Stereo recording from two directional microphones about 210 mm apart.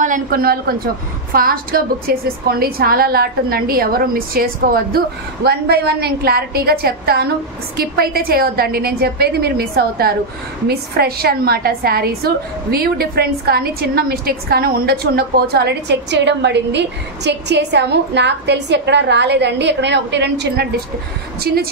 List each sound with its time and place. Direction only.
0.0 s a woman's voice: 40° right (ahead or behind)